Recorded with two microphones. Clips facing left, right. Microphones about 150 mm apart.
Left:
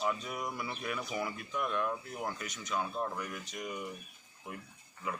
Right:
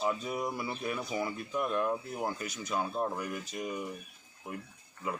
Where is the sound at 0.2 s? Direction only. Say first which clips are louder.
Right 4 dB; 30° right (ahead or behind).